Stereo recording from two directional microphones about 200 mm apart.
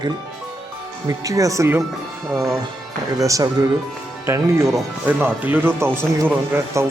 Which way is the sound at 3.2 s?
15° right (ahead or behind).